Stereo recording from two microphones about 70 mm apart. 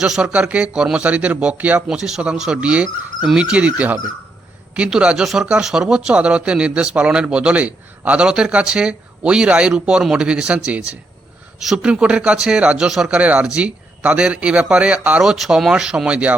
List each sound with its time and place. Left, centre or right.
0.0 s speech: centre
1.9 s speech: centre
11.8 s speech: centre
13.1 s speech: centre
15.2 s speech: centre